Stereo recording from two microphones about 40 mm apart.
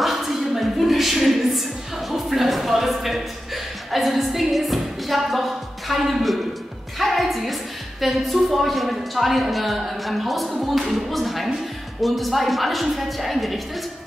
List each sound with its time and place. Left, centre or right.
0.0 s a sound: centre
0.6 s music: centre
7.0 s a woman's voice: centre